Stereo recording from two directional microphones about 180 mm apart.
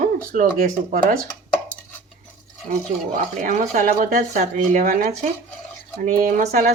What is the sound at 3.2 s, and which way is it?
A woman's voice, 45° right (ahead or behind).